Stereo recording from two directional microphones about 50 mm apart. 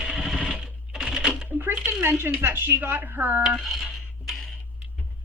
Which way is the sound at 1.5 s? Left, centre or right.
Right.